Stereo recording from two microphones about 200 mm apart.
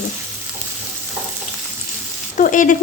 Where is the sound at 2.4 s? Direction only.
40° left (ahead or behind).